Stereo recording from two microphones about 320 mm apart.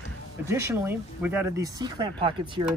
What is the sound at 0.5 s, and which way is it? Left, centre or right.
Speech, centre.